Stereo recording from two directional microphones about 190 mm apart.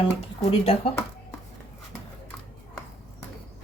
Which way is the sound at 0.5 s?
30° left (ahead or behind).